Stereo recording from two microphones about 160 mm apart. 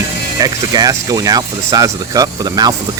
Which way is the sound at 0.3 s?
25° right (ahead or behind).